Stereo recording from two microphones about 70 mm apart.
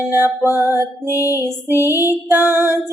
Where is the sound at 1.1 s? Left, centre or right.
Left.